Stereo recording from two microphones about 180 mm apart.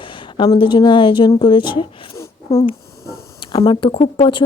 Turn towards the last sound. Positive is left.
turn(degrees=25)  # may be behind; listen again after turning